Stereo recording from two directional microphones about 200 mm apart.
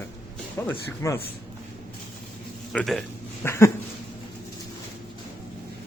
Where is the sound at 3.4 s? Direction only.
15° left (ahead or behind).